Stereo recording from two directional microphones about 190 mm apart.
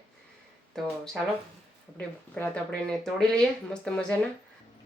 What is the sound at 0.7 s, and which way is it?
Speech, centre (ahead or behind).